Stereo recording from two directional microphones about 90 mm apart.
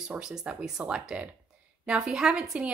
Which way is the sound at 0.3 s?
10° right (ahead or behind).